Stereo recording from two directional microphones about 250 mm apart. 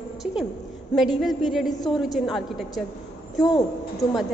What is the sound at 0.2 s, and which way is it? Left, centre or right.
A woman's voice, centre.